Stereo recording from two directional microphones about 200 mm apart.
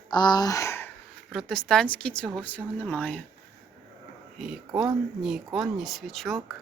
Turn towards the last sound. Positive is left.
turn(degrees=0)  # may be behind; listen again after turning